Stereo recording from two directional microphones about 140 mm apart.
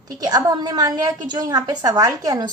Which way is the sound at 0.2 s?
25° right (ahead or behind).